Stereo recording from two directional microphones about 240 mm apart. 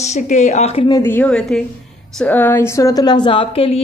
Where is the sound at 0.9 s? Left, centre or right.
Centre.